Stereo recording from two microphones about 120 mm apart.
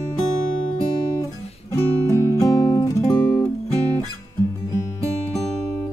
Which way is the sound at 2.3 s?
30° left (ahead or behind).